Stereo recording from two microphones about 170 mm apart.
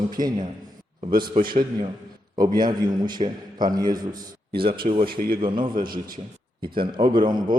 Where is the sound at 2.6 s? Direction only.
25° right (ahead or behind).